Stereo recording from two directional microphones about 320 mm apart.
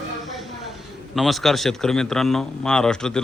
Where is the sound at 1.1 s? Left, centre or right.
Centre.